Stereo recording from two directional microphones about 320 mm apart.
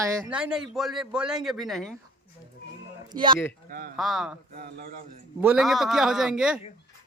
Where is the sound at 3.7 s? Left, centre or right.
Right.